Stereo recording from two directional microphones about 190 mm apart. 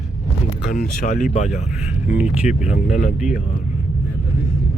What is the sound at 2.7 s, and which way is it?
Speech, 40° left (ahead or behind).